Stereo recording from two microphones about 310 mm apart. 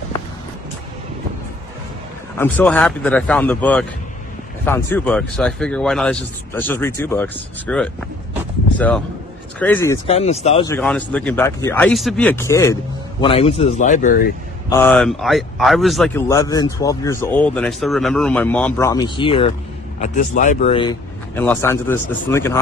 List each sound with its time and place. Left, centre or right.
2.3 s a man's voice: centre
10.0 s a man's voice: centre
10.7 s a man's voice: centre; by 14.3 s left
14.7 s a man's voice: centre